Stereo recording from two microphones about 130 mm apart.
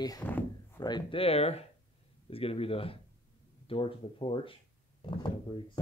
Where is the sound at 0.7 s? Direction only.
35° left (ahead or behind).